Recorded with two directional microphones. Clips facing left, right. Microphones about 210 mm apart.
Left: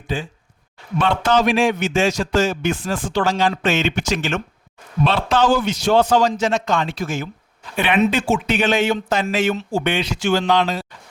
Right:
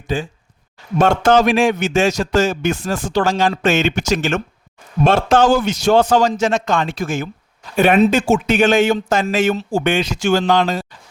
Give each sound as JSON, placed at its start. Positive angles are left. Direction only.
{"t": 0.1, "sound": "a man's voice", "side_deg": -45}